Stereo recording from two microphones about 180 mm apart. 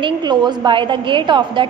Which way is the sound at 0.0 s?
25° right (ahead or behind).